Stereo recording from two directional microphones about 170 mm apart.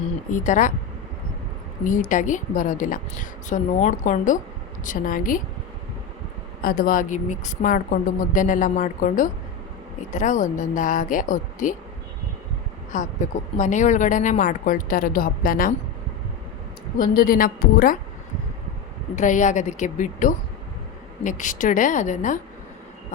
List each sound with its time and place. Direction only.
0.3 s speech: 50° left (ahead or behind)
1.8 s speech: 50° left (ahead or behind)
6.6 s speech: 60° left (ahead or behind)
12.9 s speech: 45° left (ahead or behind)
17.0 s a woman's voice: 55° left (ahead or behind)
19.1 s speech: 45° left (ahead or behind)